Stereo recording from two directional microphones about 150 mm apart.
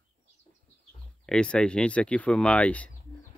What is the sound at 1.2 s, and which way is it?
Speech, 5° left (ahead or behind).